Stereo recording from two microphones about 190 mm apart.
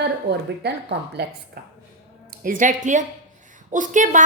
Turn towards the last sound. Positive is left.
turn(degrees=-40)  # may be behind; listen again after turning